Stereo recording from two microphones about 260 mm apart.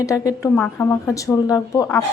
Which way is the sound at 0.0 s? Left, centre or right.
Centre.